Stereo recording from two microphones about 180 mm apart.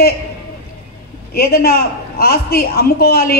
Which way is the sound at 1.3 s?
60° left (ahead or behind).